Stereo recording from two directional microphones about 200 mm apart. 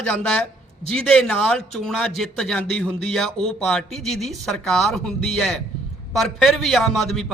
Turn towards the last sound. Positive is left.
turn(degrees=0)  # may be behind; listen again after turning